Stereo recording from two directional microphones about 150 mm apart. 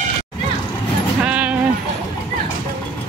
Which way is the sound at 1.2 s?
10° right (ahead or behind).